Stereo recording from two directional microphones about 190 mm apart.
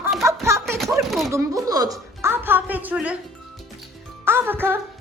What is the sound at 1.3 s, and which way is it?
A woman's voice, 20° right (ahead or behind).